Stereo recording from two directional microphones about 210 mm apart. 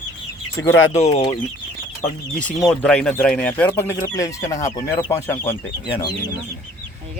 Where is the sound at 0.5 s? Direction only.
70° left (ahead or behind).